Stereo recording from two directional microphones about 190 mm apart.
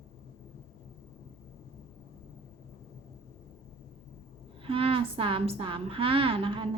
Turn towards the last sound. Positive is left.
turn(degrees=-25)  # may be behind; listen again after turning